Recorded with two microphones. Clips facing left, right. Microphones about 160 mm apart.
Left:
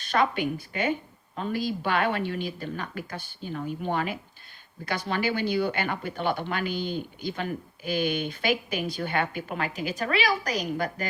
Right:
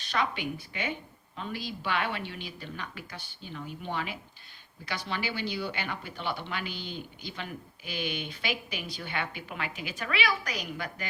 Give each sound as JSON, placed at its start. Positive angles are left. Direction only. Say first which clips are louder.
{"t": 0.0, "sound": "speech", "louder": "left 6 dB", "side_deg": 50}